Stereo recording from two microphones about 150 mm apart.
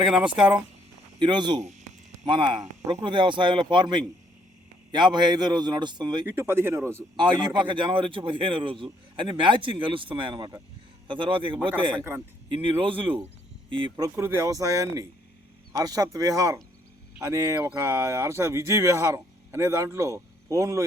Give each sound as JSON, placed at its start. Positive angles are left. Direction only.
{"t": 0.3, "sound": "speech", "side_deg": -5}
{"t": 1.2, "sound": "a man's voice", "side_deg": -30}
{"t": 6.2, "sound": "speech", "side_deg": -15}
{"t": 7.2, "sound": "a man's voice", "side_deg": -30}
{"t": 14.2, "sound": "speech", "side_deg": -20}